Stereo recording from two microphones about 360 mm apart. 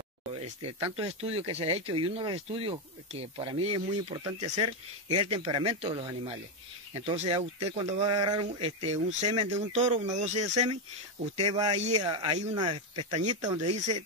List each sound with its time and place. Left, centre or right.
0.4 s speech: centre